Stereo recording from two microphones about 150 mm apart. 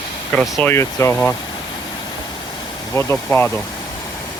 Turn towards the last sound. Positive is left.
turn(degrees=15)  # may be behind; listen again after turning